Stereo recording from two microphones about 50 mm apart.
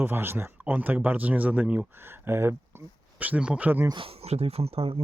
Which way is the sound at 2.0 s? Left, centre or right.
Right.